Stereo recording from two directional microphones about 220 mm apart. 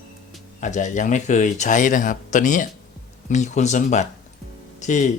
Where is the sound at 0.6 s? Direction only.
35° left (ahead or behind).